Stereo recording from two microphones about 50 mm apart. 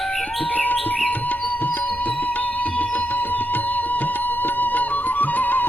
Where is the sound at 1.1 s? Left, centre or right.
Left.